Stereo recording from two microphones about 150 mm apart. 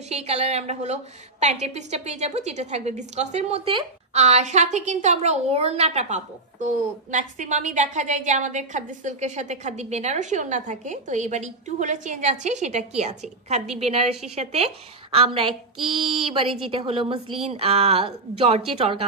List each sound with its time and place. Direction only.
0.1 s a woman's voice: 45° right (ahead or behind)